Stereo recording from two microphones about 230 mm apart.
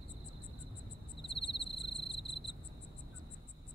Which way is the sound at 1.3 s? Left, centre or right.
Left.